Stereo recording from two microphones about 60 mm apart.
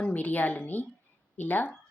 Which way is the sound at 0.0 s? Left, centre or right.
Left.